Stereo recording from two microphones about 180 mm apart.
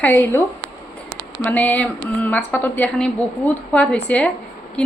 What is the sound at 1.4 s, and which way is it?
A woman's voice, 10° left (ahead or behind).